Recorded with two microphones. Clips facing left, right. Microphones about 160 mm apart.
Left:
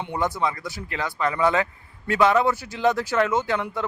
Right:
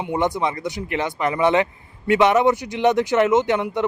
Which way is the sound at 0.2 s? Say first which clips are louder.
Right 2 dB; 20° right (ahead or behind).